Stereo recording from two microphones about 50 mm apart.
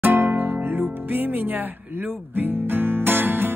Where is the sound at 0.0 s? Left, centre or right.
Right.